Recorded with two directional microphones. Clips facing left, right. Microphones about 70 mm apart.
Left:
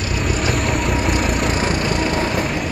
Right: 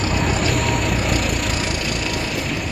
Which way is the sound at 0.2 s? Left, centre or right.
Centre.